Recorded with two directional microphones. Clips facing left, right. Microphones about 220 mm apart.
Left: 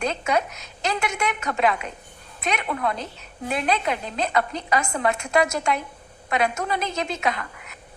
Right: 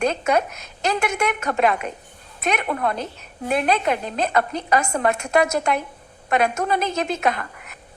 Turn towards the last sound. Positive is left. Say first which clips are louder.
# right 3 dB
turn(degrees=-50)  # may be behind; listen again after turning